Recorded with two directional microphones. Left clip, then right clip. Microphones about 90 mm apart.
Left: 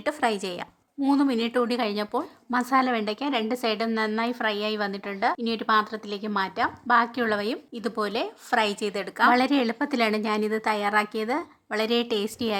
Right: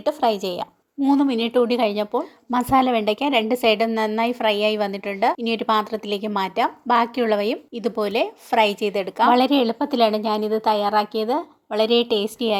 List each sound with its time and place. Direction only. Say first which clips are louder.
0.0 s a woman's voice: right 5 dB; 5° right (ahead or behind)
1.1 s a woman's voice: right 5 dB; 20° right (ahead or behind)
2.5 s a woman's voice: right 5 dB; 30° right (ahead or behind); by 12.2 s 10° right (ahead or behind)